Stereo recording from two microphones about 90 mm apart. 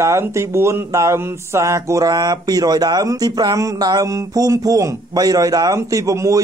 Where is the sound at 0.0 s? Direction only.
30° right (ahead or behind).